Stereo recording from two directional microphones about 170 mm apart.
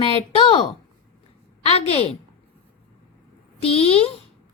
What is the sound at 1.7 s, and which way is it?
Speech, 35° left (ahead or behind).